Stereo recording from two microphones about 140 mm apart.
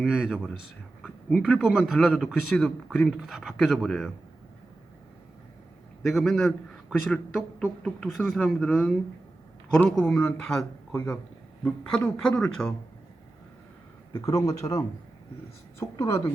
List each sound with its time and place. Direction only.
0.0 s speech: 5° right (ahead or behind)
6.0 s speech: centre (ahead or behind)
14.2 s a man's voice: 20° left (ahead or behind)